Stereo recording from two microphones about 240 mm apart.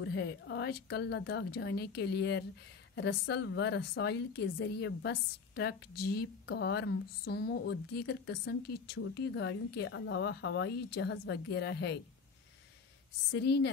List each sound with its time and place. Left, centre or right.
0.0 s a woman's voice: left
13.3 s a woman's voice: left